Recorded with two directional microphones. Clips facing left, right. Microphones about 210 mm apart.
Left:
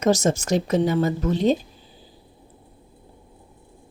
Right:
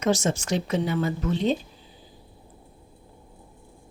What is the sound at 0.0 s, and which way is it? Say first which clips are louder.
Speech: left 4 dB; 40° left (ahead or behind).